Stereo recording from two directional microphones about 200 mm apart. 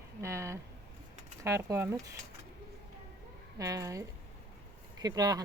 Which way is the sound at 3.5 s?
15° right (ahead or behind).